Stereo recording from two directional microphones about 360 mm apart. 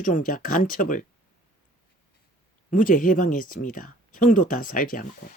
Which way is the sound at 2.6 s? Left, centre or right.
Left.